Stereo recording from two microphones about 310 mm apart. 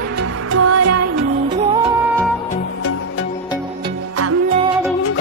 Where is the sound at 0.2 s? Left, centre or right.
Right.